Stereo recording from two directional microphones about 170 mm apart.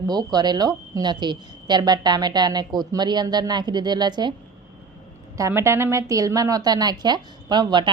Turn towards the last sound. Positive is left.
turn(degrees=-25)  # may be behind; listen again after turning